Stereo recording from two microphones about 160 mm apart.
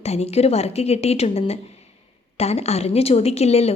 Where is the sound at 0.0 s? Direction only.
40° left (ahead or behind).